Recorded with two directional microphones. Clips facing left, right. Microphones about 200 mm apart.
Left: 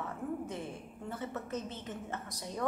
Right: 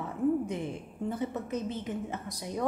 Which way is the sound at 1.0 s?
15° right (ahead or behind).